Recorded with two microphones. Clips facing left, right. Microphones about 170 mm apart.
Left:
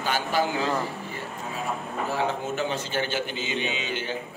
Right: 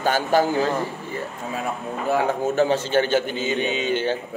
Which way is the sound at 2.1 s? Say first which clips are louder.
Right 8 dB; 45° right (ahead or behind).